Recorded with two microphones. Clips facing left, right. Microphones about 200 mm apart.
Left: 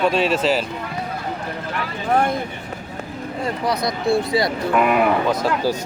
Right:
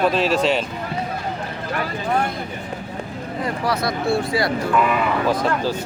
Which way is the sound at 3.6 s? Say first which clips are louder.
Left 1 dB; 20° left (ahead or behind).